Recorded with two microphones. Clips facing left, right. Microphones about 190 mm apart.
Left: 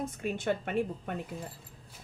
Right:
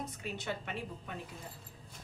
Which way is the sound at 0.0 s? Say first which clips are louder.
Left 8 dB; 50° left (ahead or behind).